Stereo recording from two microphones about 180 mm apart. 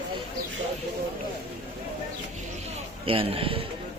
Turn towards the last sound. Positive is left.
turn(degrees=-30)  # may be behind; listen again after turning